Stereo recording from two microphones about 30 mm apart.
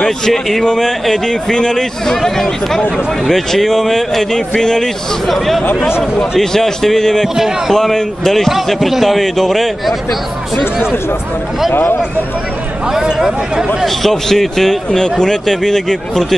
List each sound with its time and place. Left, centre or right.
0.3 s speech: centre
0.7 s a man's voice: centre
4.3 s a man's voice: left
6.5 s speech: centre
7.3 s speech: centre
7.7 s a man's voice: centre
12.9 s speech: centre
13.8 s speech: centre
14.9 s a man's voice: left